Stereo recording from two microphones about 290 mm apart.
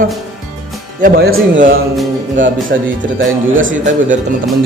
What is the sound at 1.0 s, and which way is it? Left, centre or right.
Speech, right.